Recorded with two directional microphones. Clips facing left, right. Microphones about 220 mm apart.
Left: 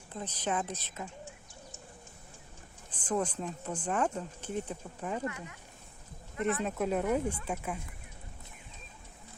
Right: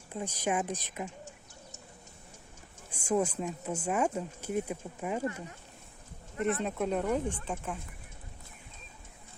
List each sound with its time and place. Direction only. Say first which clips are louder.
0.1 s speech: right 2 dB; 10° right (ahead or behind)
2.9 s speech: right 3 dB; 10° right (ahead or behind)
5.2 s speech: right 3 dB; 35° right (ahead or behind)
6.4 s speech: right 1 dB; centre (ahead or behind)